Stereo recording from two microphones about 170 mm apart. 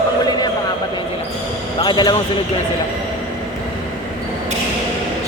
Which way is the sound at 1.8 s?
25° left (ahead or behind).